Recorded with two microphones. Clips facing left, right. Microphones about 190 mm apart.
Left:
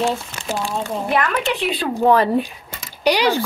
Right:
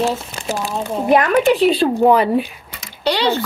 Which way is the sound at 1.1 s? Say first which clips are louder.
Right 9 dB; 35° right (ahead or behind).